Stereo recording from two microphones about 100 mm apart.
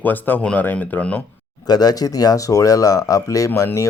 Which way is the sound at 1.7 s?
40° left (ahead or behind).